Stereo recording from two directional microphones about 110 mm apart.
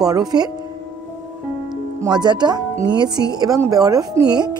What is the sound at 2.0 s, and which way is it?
Speech, 40° right (ahead or behind).